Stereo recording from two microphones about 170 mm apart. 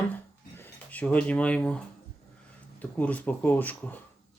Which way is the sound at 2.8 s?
10° left (ahead or behind).